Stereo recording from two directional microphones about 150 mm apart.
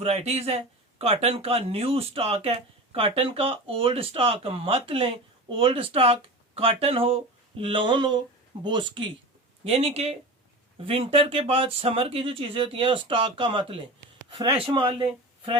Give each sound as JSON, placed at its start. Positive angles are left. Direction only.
{"t": 0.0, "sound": "speech", "side_deg": -45}
{"t": 9.6, "sound": "speech", "side_deg": -45}